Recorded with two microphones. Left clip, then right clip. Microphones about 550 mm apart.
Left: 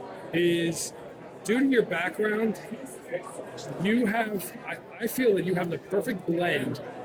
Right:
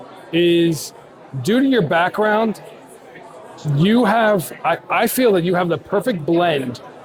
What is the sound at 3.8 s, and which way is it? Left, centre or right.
Speech, right.